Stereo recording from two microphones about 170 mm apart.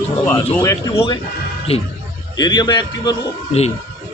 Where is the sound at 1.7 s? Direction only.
35° left (ahead or behind).